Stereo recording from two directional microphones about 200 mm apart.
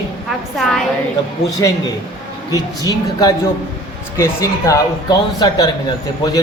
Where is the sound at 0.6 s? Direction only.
Centre (ahead or behind).